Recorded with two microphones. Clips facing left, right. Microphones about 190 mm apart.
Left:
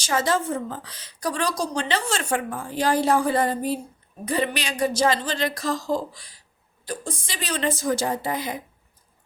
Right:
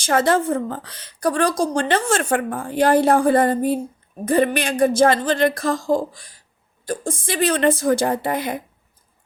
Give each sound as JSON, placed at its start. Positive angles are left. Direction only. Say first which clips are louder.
{"t": 0.0, "sound": "a woman's voice", "louder": "right 6 dB", "side_deg": -55}